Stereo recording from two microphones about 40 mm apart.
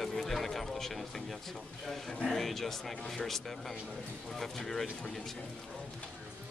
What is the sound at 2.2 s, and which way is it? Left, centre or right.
Speech, centre.